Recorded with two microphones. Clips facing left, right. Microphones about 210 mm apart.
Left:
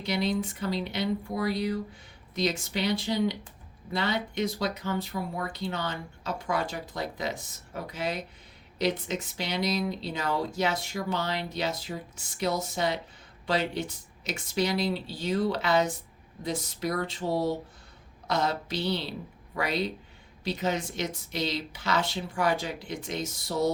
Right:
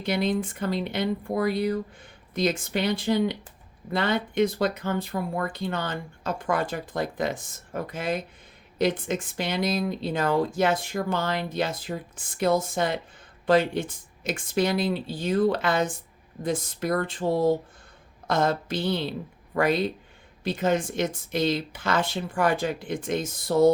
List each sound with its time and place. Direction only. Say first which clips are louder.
0.0 s speech: right 3 dB; 55° right (ahead or behind)